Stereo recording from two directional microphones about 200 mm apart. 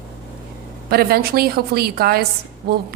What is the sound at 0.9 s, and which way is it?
A woman's voice, 50° right (ahead or behind).